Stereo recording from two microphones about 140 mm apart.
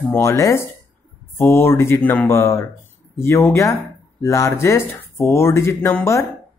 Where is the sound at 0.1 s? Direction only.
20° left (ahead or behind).